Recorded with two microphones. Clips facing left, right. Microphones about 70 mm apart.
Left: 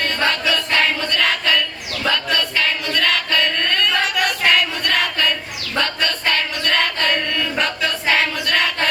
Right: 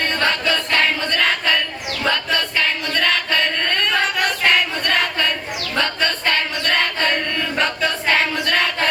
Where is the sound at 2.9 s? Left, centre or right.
Right.